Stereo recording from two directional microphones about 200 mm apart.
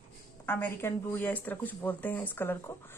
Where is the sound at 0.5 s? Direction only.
10° left (ahead or behind).